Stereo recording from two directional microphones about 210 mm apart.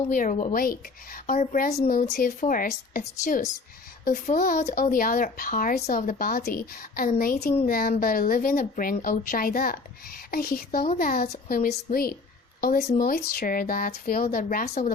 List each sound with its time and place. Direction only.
0.1 s a woman's voice: 35° left (ahead or behind)